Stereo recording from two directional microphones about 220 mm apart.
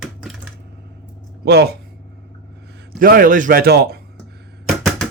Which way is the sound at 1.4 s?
45° right (ahead or behind).